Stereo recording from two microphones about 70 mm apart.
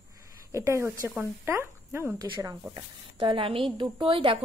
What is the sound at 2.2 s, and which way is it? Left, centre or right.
Speech, right.